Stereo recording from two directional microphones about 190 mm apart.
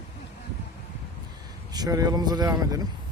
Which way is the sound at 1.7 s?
20° right (ahead or behind).